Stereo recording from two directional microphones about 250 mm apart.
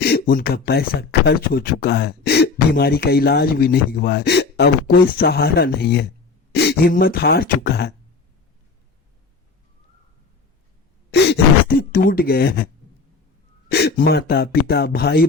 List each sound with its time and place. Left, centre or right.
0.0 s speech: left
11.1 s speech: left
13.7 s speech: left